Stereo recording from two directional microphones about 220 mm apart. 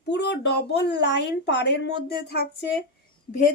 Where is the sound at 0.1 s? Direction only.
50° left (ahead or behind).